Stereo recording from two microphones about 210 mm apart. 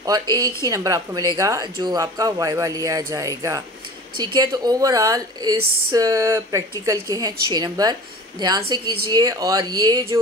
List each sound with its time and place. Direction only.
0.7 s speech: 15° right (ahead or behind)